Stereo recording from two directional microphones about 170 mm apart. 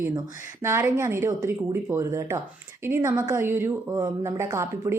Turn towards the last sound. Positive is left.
turn(degrees=-15)  # may be behind; listen again after turning